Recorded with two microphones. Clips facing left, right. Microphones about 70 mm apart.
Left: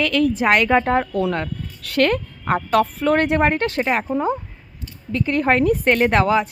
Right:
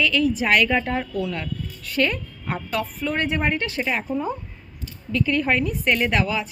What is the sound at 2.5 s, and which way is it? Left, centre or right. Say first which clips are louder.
A woman's voice: left 9 dB; left.